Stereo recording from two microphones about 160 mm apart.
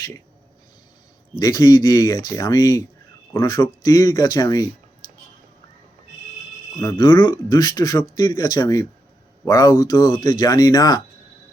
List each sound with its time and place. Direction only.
1.4 s speech: 25° left (ahead or behind)
6.9 s speech: 30° left (ahead or behind)